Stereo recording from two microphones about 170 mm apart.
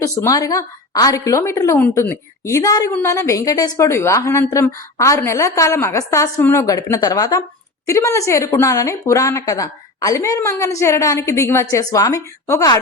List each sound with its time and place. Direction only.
0.0 s a woman's voice: 20° left (ahead or behind)